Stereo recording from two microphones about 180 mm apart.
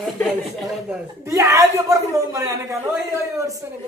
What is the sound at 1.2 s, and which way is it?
A man's voice, 15° right (ahead or behind).